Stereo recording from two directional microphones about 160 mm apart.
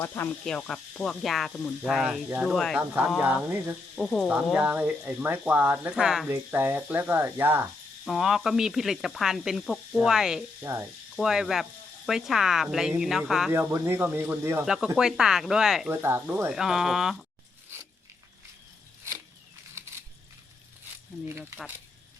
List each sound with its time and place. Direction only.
0.0 s speech: 15° left (ahead or behind)
0.4 s sizzle: 5° left (ahead or behind)
3.2 s speech: 5° right (ahead or behind)
3.9 s sizzle: 5° left (ahead or behind)
4.3 s speech: 5° right (ahead or behind)
6.3 s speech: 15° right (ahead or behind)
8.0 s sizzle: centre (ahead or behind)
10.6 s speech: 15° right (ahead or behind)
11.2 s sizzle: centre (ahead or behind)
13.5 s speech: 15° right (ahead or behind)
14.6 s sizzle: 5° right (ahead or behind)
15.9 s sizzle: 15° right (ahead or behind)
21.2 s speech: 15° right (ahead or behind)